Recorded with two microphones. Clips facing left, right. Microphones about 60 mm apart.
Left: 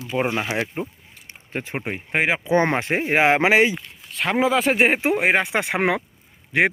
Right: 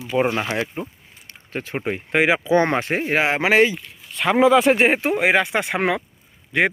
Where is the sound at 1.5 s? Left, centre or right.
Left.